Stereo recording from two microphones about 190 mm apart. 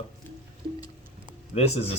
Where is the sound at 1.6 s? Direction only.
35° left (ahead or behind).